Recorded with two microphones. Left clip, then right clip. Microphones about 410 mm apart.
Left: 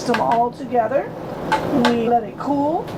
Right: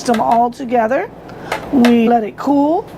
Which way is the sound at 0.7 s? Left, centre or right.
Right.